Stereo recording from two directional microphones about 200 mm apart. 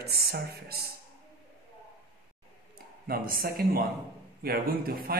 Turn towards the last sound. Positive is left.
turn(degrees=-50)  # may be behind; listen again after turning